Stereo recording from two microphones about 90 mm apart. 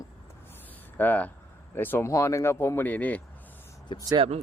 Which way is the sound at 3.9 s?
70° left (ahead or behind).